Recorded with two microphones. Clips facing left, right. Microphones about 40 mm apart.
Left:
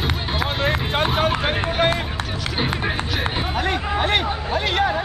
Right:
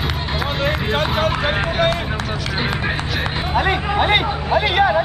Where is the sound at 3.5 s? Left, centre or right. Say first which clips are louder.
Right 7 dB; centre.